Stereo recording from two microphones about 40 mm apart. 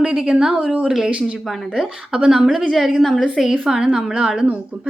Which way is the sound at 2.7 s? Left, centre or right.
Centre.